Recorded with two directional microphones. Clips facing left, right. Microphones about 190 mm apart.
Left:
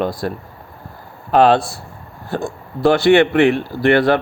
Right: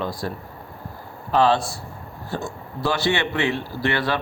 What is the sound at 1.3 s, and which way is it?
Speech, 60° left (ahead or behind).